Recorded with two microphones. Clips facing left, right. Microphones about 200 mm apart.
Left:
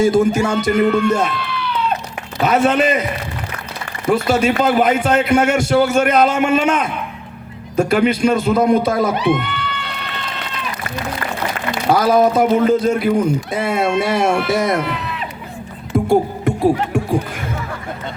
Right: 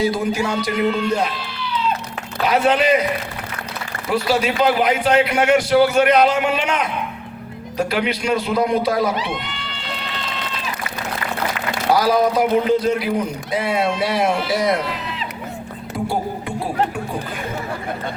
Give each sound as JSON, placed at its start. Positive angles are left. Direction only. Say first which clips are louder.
{"t": 0.0, "sound": "a man's voice", "louder": "left 6 dB", "side_deg": 45}
{"t": 4.1, "sound": "a man's voice", "louder": "left 4 dB", "side_deg": 45}
{"t": 11.9, "sound": "a man's voice", "louder": "left 3 dB", "side_deg": 50}
{"t": 15.9, "sound": "music", "louder": "left 7 dB", "side_deg": 50}